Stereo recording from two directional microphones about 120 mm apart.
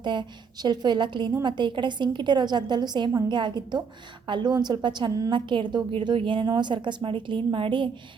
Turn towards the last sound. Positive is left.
turn(degrees=-45)  # may be behind; listen again after turning